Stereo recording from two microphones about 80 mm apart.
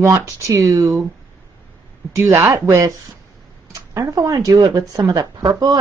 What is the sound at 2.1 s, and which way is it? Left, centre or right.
Speech, right.